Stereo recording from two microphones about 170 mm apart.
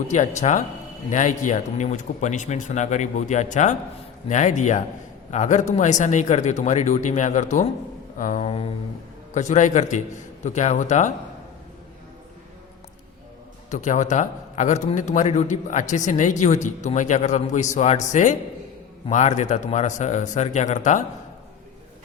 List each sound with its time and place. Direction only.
0.1 s a man's voice: 45° left (ahead or behind)
8.2 s a sound: 45° left (ahead or behind)
9.3 s a man's voice: 45° left (ahead or behind)
13.7 s a man's voice: 45° left (ahead or behind)